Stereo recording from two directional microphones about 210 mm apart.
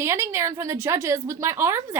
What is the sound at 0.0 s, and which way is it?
Speech, 10° right (ahead or behind).